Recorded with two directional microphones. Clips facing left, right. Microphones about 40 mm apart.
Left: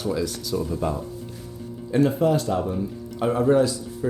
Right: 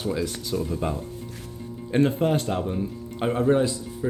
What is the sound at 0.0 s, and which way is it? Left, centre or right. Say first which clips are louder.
Speech: left 1 dB; centre.